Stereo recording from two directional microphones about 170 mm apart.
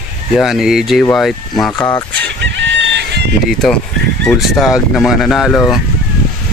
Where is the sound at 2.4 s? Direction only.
90° right.